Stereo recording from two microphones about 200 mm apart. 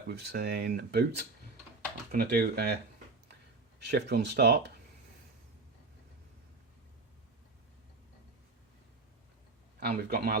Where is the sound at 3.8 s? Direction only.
55° right (ahead or behind).